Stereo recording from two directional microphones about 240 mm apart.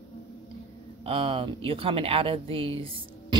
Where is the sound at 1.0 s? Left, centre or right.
Right.